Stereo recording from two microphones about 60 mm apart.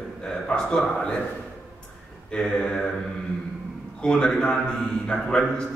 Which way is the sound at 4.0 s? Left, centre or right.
Centre.